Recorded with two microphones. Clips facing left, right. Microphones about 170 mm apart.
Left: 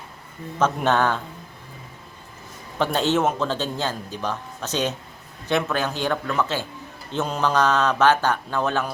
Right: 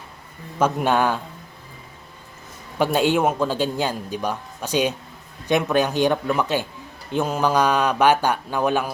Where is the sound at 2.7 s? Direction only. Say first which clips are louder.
Right 2 dB; 10° right (ahead or behind).